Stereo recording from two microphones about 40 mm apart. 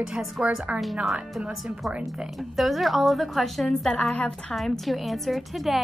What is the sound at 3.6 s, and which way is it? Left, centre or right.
Speech, centre.